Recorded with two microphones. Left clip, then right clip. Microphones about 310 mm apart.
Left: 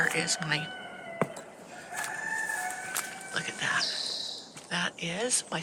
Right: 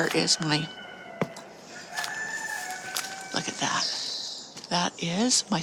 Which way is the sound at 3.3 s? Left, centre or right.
Centre.